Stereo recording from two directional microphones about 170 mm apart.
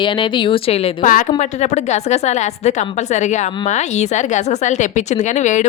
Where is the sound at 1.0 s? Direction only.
50° left (ahead or behind).